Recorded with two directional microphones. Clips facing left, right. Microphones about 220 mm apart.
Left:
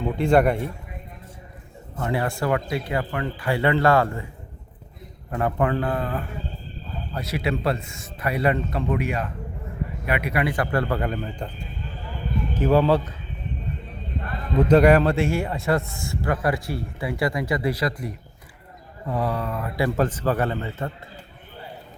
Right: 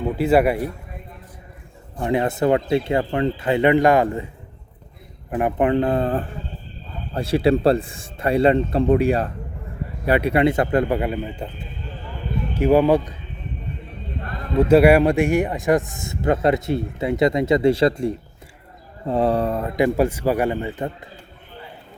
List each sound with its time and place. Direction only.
0.0 s a man's voice: 5° right (ahead or behind)
2.0 s a man's voice: 20° right (ahead or behind)
5.3 s a man's voice: 20° right (ahead or behind)
12.5 s a man's voice: 15° right (ahead or behind)
14.6 s a man's voice: 10° right (ahead or behind); by 19.7 s 30° right (ahead or behind)
19.7 s a man's voice: 15° right (ahead or behind)